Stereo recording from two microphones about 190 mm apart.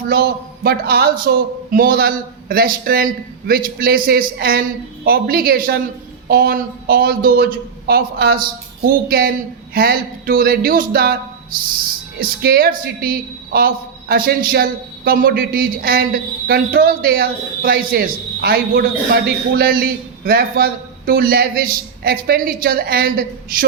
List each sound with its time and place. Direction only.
0.1 s a man's voice: 55° right (ahead or behind)
12.2 s a man's voice: 55° right (ahead or behind)